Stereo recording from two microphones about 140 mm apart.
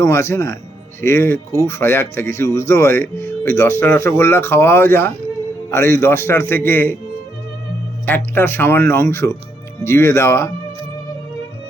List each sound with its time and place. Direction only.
0.0 s speech: 20° left (ahead or behind)
8.0 s speech: 15° left (ahead or behind)